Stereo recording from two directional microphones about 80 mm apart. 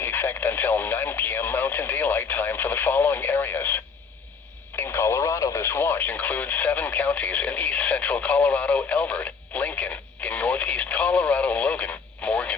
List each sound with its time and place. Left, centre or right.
0.0 s speech: left
4.8 s speech: left